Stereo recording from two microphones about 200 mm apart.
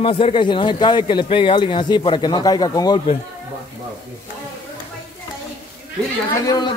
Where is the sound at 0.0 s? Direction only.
30° left (ahead or behind).